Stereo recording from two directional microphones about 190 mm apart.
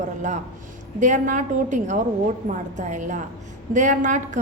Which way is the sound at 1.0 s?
40° right (ahead or behind).